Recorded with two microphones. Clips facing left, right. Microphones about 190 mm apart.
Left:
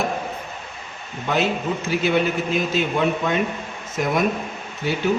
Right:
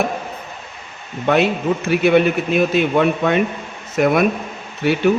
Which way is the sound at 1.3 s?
65° right (ahead or behind).